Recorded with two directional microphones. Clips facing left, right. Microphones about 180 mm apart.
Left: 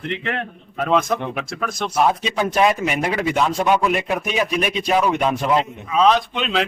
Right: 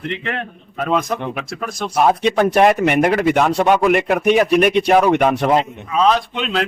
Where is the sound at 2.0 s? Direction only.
60° right (ahead or behind).